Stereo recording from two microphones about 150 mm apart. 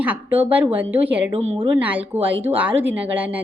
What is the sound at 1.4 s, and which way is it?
Speech, 35° right (ahead or behind).